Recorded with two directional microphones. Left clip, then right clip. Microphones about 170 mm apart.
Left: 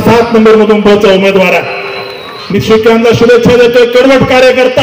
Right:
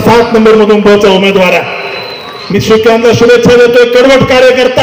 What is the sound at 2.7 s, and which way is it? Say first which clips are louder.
A man's voice: even; 30° right (ahead or behind).